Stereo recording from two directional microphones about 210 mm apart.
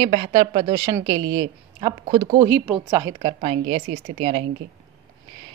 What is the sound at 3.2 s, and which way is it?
Speech, 25° right (ahead or behind).